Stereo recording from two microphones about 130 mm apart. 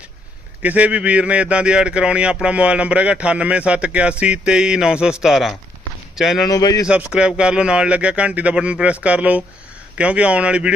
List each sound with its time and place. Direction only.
0.6 s a man's voice: 10° right (ahead or behind)
6.5 s speech: 30° left (ahead or behind)
6.8 s a man's voice: 5° right (ahead or behind)